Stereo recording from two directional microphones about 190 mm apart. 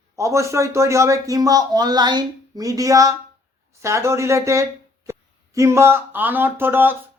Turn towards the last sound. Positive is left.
turn(degrees=-10)  # may be behind; listen again after turning